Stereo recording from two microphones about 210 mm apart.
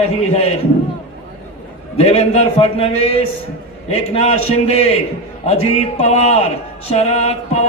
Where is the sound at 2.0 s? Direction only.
30° left (ahead or behind).